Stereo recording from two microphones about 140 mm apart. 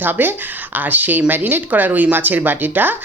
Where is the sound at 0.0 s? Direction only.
15° right (ahead or behind).